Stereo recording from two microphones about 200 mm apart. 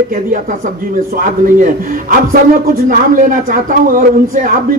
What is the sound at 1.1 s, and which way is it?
Speech, 45° right (ahead or behind).